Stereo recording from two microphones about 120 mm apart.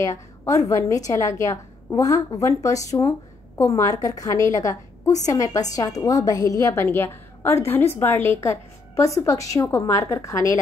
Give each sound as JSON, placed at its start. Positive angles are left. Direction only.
{"t": 0.0, "sound": "a woman's voice", "side_deg": 30}